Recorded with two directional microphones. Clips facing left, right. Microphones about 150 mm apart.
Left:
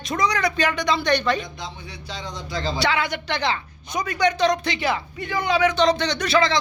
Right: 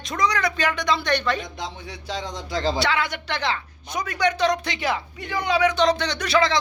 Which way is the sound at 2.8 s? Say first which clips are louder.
Left 1 dB; centre (ahead or behind).